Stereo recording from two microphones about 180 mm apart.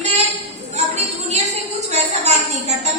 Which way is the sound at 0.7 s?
35° right (ahead or behind).